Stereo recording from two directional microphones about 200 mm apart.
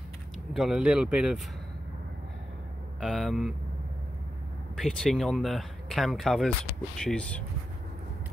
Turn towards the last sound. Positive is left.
turn(degrees=5)  # may be behind; listen again after turning